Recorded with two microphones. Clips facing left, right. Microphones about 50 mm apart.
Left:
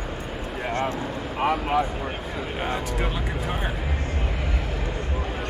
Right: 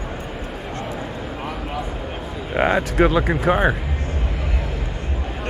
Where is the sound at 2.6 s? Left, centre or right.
Right.